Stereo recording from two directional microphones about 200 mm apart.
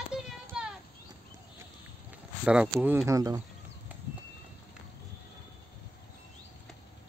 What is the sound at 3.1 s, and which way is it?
Speech, 15° right (ahead or behind).